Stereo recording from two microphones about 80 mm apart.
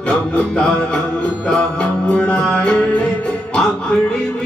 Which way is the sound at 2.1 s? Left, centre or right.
Centre.